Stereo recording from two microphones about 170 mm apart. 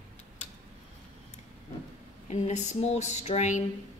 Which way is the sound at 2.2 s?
40° left (ahead or behind).